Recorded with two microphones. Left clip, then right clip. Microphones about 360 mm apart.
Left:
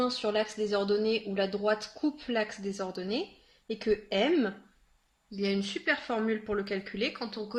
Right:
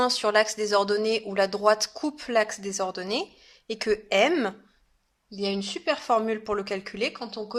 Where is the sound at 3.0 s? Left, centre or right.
Centre.